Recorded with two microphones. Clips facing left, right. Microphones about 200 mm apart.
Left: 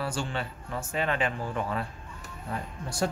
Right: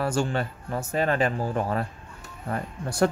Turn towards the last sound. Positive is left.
turn(degrees=-60)  # may be behind; listen again after turning